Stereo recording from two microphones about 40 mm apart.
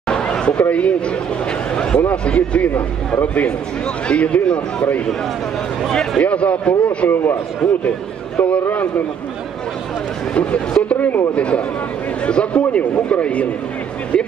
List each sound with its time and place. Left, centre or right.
0.1 s a sound: left
0.7 s speech: left
1.7 s a man's voice: left
2.0 s a man's voice: left
5.9 s speech: centre
6.2 s speech: left
7.6 s speech: centre
8.4 s speech: left
10.3 s a man's voice: left